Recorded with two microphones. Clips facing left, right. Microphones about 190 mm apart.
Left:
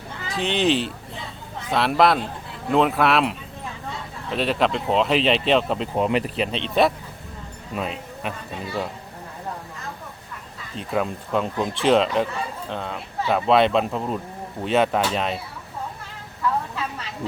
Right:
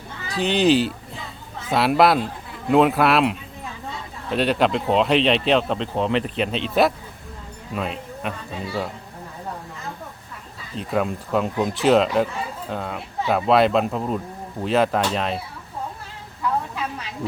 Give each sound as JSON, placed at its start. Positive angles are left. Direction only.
{"t": 0.3, "sound": "speech", "side_deg": 0}
{"t": 10.8, "sound": "speech", "side_deg": 0}